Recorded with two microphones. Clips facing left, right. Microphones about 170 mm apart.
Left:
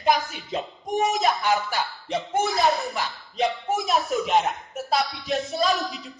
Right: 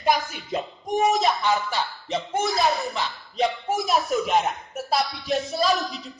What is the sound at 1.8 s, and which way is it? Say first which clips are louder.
Music: even; 20° left (ahead or behind).